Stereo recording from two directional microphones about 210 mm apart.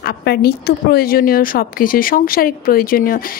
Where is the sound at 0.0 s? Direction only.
50° left (ahead or behind).